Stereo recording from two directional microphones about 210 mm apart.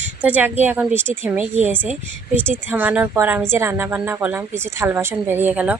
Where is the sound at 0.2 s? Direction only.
10° right (ahead or behind).